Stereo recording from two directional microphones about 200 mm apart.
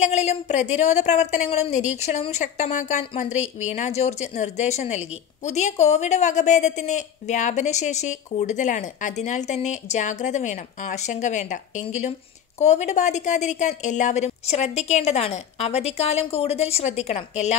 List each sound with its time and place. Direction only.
0.0 s a woman's voice: 35° left (ahead or behind)
12.5 s a woman's voice: 35° left (ahead or behind)